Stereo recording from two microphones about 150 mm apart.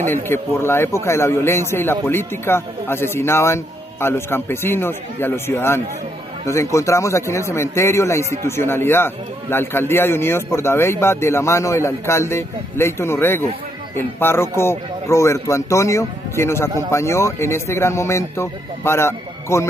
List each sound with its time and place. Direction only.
0.0 s a man's voice: 15° left (ahead or behind)